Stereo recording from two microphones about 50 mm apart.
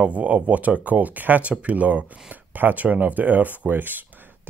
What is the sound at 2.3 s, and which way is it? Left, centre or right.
Speech, right.